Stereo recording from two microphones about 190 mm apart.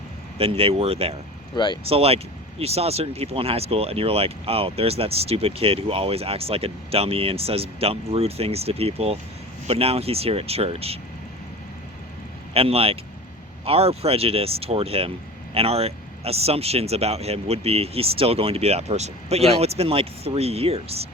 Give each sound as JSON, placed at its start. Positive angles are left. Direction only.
{"t": 0.3, "sound": "speech", "side_deg": -30}
{"t": 1.5, "sound": "speech", "side_deg": 25}
{"t": 1.8, "sound": "speech", "side_deg": -30}
{"t": 12.5, "sound": "speech", "side_deg": -30}